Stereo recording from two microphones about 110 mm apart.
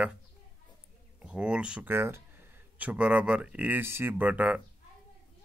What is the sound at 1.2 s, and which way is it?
Speech, 10° right (ahead or behind).